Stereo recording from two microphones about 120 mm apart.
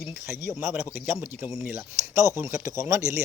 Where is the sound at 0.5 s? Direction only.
20° right (ahead or behind).